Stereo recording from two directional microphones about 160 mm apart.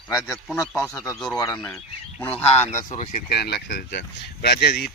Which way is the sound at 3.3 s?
85° left.